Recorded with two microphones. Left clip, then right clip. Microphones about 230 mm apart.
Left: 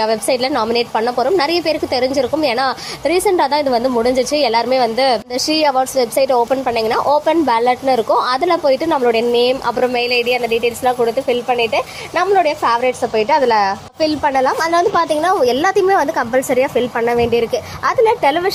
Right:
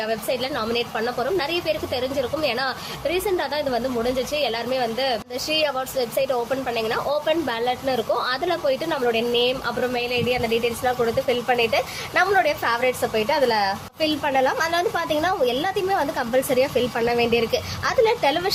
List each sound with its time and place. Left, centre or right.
0.0 s a woman's voice: left; by 18.5 s centre